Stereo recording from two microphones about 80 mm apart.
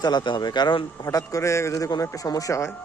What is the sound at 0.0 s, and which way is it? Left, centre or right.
Speech, left.